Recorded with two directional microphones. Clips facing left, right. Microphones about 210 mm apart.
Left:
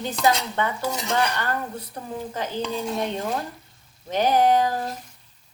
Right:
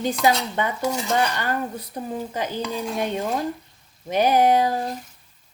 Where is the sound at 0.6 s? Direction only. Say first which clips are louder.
Right 1 dB; 15° right (ahead or behind).